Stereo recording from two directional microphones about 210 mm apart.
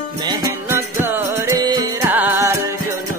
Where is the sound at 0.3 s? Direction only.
15° right (ahead or behind).